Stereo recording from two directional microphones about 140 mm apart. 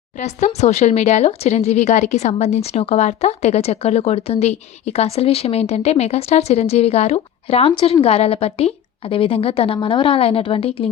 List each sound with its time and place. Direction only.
0.2 s speech: 55° left (ahead or behind)